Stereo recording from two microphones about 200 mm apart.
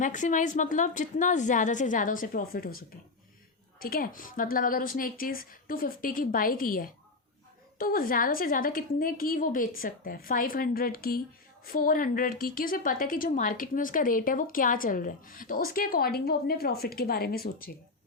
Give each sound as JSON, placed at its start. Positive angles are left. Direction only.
{"t": 0.0, "sound": "a woman's voice", "side_deg": 40}